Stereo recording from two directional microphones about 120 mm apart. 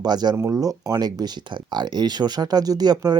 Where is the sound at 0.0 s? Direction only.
35° right (ahead or behind).